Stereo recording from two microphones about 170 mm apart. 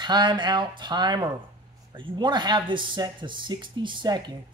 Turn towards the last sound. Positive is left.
turn(degrees=-25)  # may be behind; listen again after turning